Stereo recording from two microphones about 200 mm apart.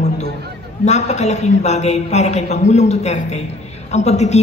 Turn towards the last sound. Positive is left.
turn(degrees=35)  # may be behind; listen again after turning